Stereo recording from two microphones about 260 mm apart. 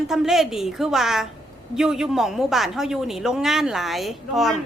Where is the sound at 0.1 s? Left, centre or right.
Centre.